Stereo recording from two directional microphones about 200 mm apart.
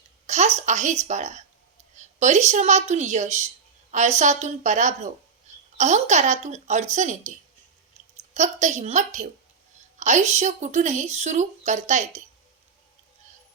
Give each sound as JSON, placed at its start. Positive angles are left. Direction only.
{"t": 0.3, "sound": "a woman's voice", "side_deg": -35}